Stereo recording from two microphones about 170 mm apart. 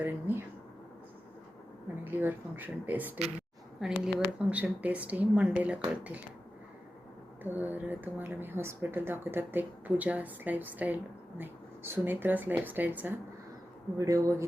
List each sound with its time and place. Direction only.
0.0 s speech: 10° right (ahead or behind)
2.0 s speech: 10° right (ahead or behind)
7.4 s speech: 10° right (ahead or behind)